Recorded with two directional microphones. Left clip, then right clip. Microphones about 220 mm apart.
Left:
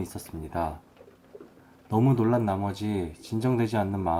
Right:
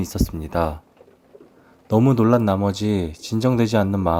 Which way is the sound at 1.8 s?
45° right (ahead or behind).